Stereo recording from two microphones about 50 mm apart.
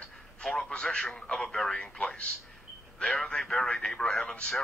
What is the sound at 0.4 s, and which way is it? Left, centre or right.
A man's voice, centre.